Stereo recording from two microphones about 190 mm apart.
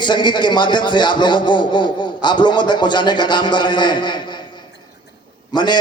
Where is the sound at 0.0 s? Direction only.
25° left (ahead or behind).